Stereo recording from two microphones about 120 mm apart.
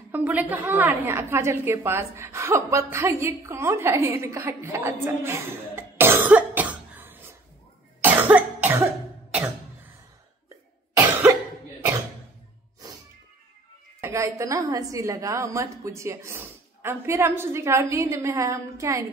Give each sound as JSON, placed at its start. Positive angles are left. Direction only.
{"t": 0.1, "sound": "a woman's voice", "side_deg": -15}
{"t": 8.0, "sound": "cough", "side_deg": -15}
{"t": 14.0, "sound": "a woman's voice", "side_deg": -25}